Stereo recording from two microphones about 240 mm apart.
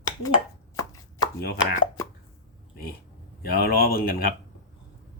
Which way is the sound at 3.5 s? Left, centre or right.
Left.